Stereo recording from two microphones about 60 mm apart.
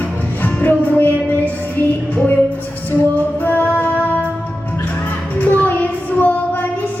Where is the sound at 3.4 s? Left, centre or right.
Left.